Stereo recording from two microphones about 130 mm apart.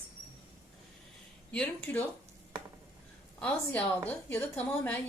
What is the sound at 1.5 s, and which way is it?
Speech, 10° left (ahead or behind).